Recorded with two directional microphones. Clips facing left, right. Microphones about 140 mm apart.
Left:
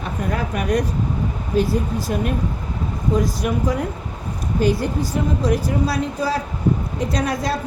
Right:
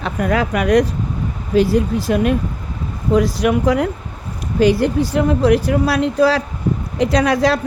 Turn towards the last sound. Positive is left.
turn(degrees=-90)